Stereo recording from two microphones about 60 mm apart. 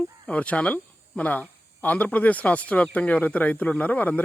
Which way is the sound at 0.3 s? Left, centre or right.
Left.